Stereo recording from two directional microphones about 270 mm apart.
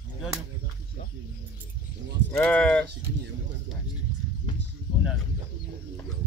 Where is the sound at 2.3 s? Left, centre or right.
Centre.